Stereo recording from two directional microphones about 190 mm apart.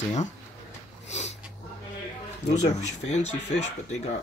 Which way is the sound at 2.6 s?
35° left (ahead or behind).